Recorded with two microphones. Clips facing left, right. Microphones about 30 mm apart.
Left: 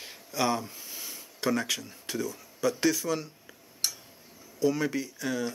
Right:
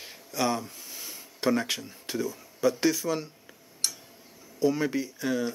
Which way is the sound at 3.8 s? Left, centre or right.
Centre.